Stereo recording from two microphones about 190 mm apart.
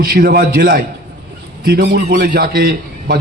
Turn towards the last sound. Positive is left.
turn(degrees=-55)  # may be behind; listen again after turning